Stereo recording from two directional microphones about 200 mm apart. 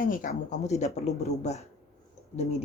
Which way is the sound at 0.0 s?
45° left (ahead or behind).